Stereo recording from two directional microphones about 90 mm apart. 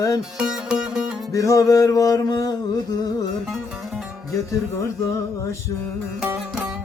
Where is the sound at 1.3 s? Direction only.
40° left (ahead or behind).